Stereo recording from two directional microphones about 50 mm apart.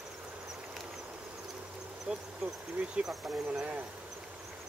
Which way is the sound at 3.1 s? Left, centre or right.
Centre.